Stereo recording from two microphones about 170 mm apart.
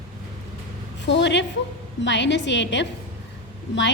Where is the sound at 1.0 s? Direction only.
90° left.